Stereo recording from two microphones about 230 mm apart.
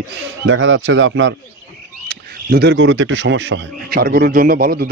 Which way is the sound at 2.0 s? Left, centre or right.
Right.